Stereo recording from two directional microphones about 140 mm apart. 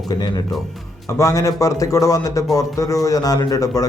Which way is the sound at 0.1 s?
30° left (ahead or behind).